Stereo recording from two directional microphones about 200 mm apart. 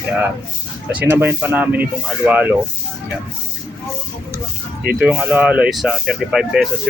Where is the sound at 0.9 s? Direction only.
10° right (ahead or behind).